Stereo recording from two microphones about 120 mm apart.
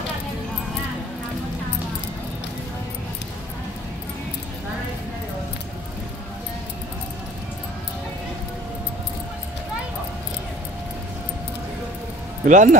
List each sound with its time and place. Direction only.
12.4 s speech: 90° right